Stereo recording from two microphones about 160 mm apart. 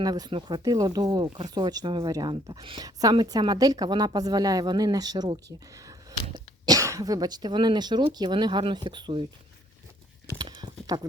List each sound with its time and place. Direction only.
0.0 s speech: 25° right (ahead or behind)
10.3 s clip-clop: 25° right (ahead or behind)